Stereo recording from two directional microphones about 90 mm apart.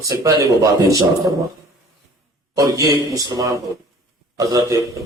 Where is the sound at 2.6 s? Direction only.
40° right (ahead or behind).